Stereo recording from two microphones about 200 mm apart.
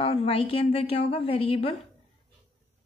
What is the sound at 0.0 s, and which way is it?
A woman's voice, 30° left (ahead or behind).